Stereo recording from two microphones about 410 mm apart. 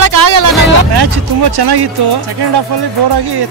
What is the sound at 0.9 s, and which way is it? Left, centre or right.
Speech, right.